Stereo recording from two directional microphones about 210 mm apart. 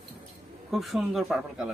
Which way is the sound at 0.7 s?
Centre (ahead or behind).